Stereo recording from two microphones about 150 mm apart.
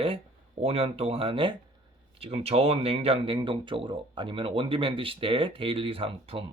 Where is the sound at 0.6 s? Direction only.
40° right (ahead or behind).